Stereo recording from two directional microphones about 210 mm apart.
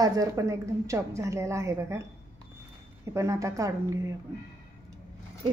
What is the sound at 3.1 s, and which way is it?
A woman's voice, 15° right (ahead or behind).